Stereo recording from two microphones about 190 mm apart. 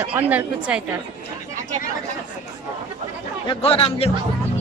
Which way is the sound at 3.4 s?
30° left (ahead or behind).